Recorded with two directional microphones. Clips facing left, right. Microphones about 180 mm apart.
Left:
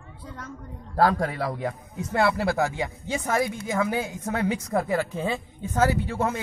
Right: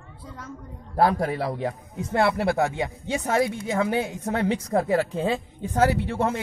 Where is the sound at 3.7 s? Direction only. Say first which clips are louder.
Right 2 dB; 35° right (ahead or behind).